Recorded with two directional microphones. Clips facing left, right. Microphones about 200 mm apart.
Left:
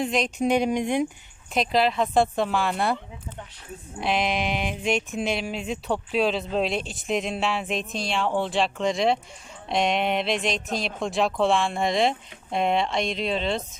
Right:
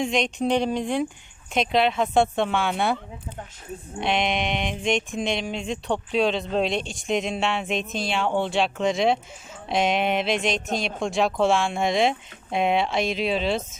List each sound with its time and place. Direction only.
0.0 s speech: 5° left (ahead or behind)
1.5 s speech: centre (ahead or behind)
4.0 s speech: centre (ahead or behind)